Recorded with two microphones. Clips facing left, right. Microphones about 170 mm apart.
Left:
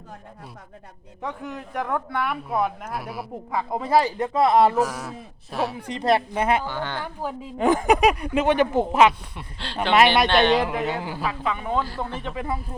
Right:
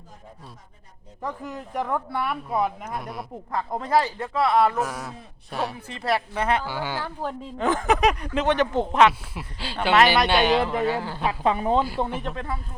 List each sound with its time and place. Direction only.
1.2 s speech: centre (ahead or behind); by 4.7 s 20° left (ahead or behind)
4.7 s speech: centre (ahead or behind)
5.9 s speech: 20° left (ahead or behind)
6.7 s speech: 10° right (ahead or behind)
7.0 s speech: 10° left (ahead or behind)
9.3 s speech: 5° right (ahead or behind)
10.6 s speech: 15° left (ahead or behind)
11.2 s a woman's voice: 30° right (ahead or behind)
11.8 s speech: 15° right (ahead or behind)
12.1 s speech: centre (ahead or behind)